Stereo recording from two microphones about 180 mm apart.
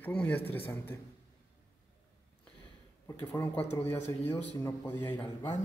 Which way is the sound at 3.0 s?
10° left (ahead or behind).